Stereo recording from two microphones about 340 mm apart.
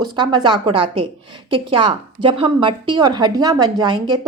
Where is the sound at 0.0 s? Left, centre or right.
Centre.